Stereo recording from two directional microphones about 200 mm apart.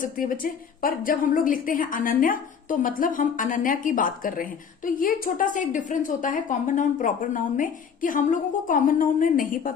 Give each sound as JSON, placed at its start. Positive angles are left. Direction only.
{"t": 0.0, "sound": "a woman's voice", "side_deg": 45}